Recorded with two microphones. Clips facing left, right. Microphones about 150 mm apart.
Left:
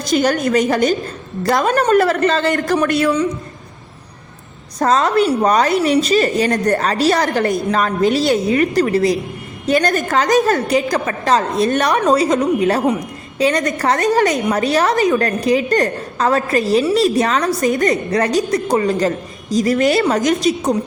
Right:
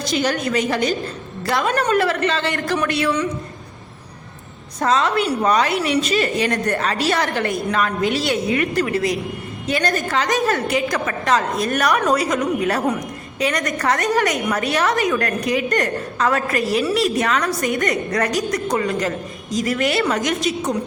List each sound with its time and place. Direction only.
0.0 s a woman's voice: 45° left (ahead or behind)
4.8 s a woman's voice: 45° left (ahead or behind)